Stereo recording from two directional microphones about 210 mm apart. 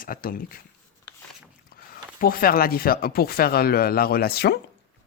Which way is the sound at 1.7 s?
45° left (ahead or behind).